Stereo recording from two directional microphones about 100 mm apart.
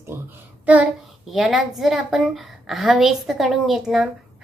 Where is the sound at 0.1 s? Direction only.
25° right (ahead or behind).